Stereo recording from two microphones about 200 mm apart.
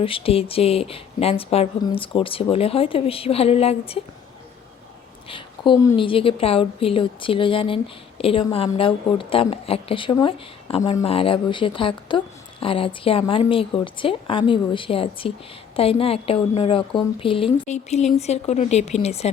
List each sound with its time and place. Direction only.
0.0 s speech: 25° left (ahead or behind)
5.3 s a woman's voice: 20° left (ahead or behind)